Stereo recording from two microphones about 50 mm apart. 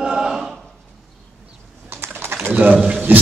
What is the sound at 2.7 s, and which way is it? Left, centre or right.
Pigeon, centre.